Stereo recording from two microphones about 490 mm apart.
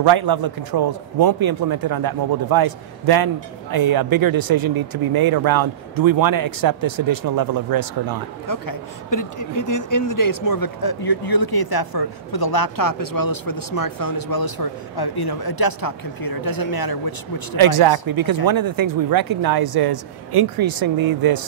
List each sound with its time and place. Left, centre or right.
0.0 s speech: right
8.5 s speech: left
17.6 s speech: right